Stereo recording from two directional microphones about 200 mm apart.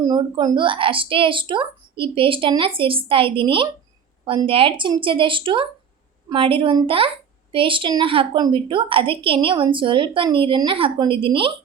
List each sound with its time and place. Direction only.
0.0 s a woman's voice: 20° right (ahead or behind)